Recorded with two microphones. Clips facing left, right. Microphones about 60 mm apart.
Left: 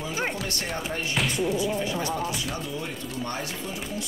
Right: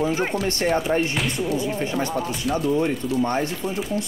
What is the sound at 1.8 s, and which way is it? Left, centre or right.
Speech, right.